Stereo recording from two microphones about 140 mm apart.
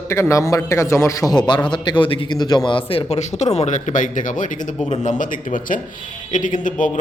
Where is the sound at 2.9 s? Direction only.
45° left (ahead or behind).